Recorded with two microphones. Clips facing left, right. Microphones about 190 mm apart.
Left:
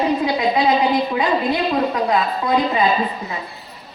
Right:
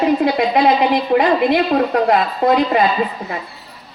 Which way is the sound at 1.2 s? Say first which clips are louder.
Right 5 dB; 60° right (ahead or behind).